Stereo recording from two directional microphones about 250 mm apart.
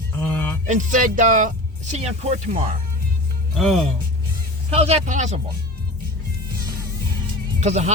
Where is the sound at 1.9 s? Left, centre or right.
Right.